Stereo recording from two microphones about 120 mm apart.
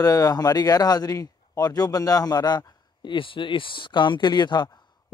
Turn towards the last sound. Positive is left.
turn(degrees=35)  # may be behind; listen again after turning